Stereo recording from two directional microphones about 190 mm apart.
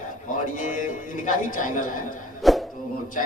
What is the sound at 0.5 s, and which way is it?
A man's voice, 40° left (ahead or behind).